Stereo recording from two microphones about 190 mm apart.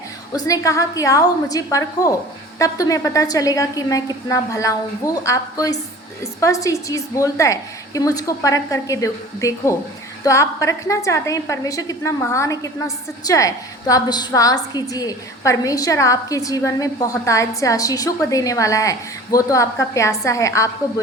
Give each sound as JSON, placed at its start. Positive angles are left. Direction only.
{"t": 0.3, "sound": "a woman's voice", "side_deg": 20}